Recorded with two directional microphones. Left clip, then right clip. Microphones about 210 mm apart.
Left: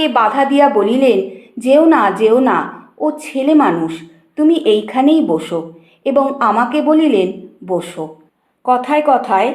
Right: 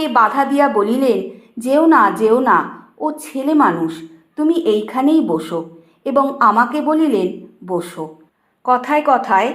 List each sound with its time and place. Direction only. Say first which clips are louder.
0.0 s a woman's voice: left 1 dB; 15° right (ahead or behind)